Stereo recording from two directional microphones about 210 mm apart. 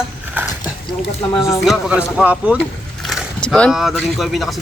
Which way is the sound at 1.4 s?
15° left (ahead or behind).